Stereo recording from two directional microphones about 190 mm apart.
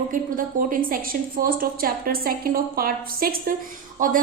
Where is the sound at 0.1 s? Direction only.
45° right (ahead or behind).